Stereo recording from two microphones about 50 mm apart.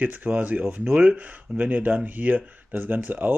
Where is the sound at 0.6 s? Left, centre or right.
Centre.